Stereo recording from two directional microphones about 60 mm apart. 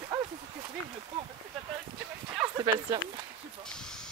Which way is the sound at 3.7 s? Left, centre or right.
Centre.